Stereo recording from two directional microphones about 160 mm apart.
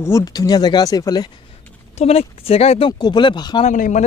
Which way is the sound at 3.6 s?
50° left (ahead or behind).